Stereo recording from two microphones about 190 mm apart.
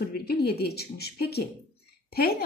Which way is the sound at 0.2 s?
55° left (ahead or behind).